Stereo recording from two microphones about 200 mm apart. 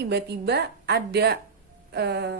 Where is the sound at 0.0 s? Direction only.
55° right (ahead or behind).